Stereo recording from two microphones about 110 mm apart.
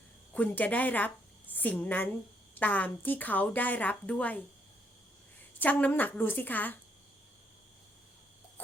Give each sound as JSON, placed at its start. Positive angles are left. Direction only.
{"t": 0.3, "sound": "a woman's voice", "side_deg": 15}
{"t": 5.5, "sound": "a woman's voice", "side_deg": 15}